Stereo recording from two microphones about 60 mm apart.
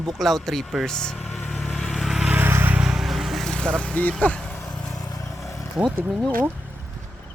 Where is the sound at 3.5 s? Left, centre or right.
Centre.